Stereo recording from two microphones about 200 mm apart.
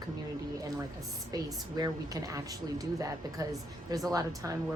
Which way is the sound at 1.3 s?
20° right (ahead or behind).